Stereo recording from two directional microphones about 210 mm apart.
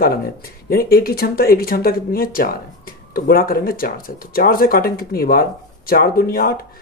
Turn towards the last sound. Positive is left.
turn(degrees=45)  # may be behind; listen again after turning